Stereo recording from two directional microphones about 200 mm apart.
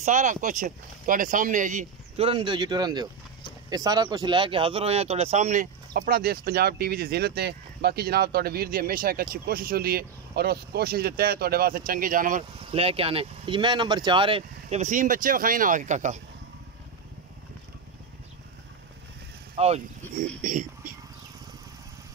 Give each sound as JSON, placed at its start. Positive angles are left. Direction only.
{"t": 0.0, "sound": "speech", "side_deg": -35}
{"t": 12.7, "sound": "speech", "side_deg": -30}
{"t": 19.5, "sound": "speech", "side_deg": -30}